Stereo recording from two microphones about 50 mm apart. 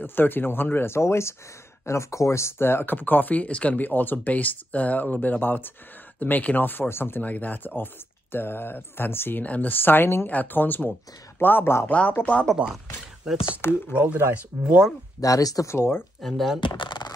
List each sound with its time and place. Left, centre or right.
0.0 s speech: left
1.9 s speech: left
3.8 s speech: left
7.2 s speech: left
9.4 s speech: left
10.3 s speech: left
13.2 s speech: centre
13.6 s speech: left
13.9 s speech: right
15.3 s speech: left
16.2 s speech: centre